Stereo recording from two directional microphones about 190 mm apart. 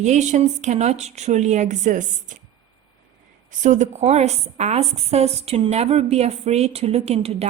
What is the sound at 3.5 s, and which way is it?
A woman's voice, 40° right (ahead or behind).